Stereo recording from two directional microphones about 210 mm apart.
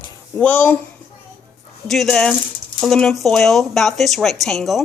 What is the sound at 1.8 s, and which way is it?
Speech, centre (ahead or behind).